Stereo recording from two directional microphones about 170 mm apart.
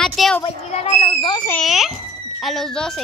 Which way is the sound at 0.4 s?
40° left (ahead or behind).